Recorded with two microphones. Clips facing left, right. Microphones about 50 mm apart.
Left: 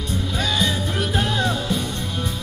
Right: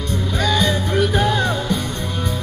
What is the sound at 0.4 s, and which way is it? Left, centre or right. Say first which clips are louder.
Music: right 4 dB; centre.